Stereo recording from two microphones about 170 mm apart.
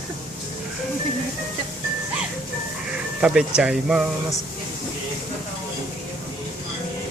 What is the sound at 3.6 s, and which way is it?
Speech, 5° right (ahead or behind).